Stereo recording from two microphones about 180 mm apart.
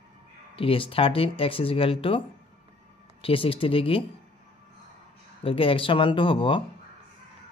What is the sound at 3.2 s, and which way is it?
Speech, 30° left (ahead or behind).